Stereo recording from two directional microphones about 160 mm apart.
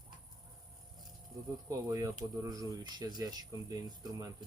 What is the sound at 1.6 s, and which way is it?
Speech, 20° right (ahead or behind).